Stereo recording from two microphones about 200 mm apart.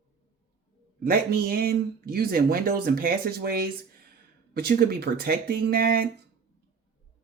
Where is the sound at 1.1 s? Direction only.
50° right (ahead or behind).